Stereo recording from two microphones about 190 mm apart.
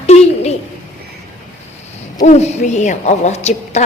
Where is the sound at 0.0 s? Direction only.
35° left (ahead or behind).